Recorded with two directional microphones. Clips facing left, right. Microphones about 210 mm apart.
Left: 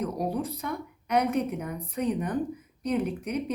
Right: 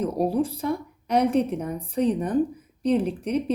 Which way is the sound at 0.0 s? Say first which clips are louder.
Right 6 dB; 30° right (ahead or behind).